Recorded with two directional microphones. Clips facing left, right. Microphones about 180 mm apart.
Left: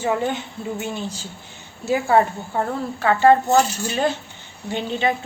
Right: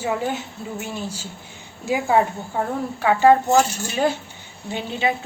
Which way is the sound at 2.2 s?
5° right (ahead or behind).